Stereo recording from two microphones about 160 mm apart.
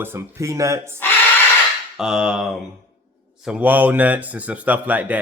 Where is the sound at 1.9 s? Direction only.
5° right (ahead or behind).